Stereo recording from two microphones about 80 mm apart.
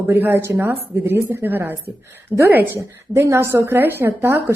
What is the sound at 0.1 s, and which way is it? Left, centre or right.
A woman's voice, right.